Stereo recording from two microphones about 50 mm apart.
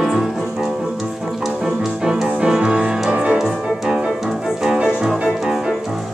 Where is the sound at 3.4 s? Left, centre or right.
Centre.